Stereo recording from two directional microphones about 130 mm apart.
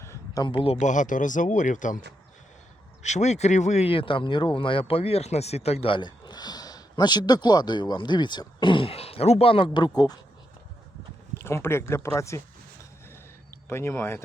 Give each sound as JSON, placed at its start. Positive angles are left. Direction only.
{"t": 0.0, "sound": "a sound", "side_deg": 20}
{"t": 0.4, "sound": "a man's voice", "side_deg": 45}
{"t": 0.8, "sound": "speech", "side_deg": 75}
{"t": 3.0, "sound": "speech", "side_deg": 60}
{"t": 11.3, "sound": "speech", "side_deg": 20}
{"t": 13.5, "sound": "speech", "side_deg": 20}